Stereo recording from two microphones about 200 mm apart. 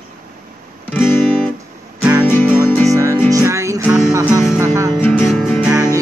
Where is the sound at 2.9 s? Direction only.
15° right (ahead or behind).